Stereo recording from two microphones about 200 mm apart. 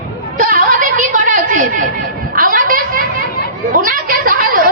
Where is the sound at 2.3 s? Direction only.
45° right (ahead or behind).